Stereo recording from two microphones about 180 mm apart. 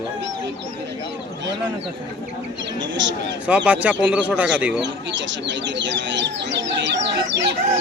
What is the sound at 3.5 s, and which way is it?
Speech, 5° right (ahead or behind).